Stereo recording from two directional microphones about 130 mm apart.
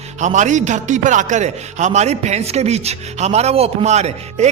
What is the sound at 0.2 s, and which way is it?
A man's voice, 65° right (ahead or behind).